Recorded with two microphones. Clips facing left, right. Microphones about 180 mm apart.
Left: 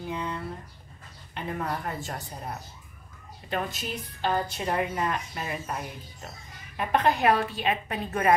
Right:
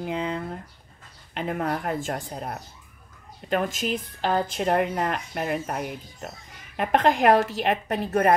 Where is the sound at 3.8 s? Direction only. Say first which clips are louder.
Right 4 dB; 90° right.